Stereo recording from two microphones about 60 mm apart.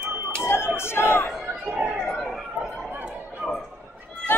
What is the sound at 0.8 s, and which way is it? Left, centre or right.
Chatter, left.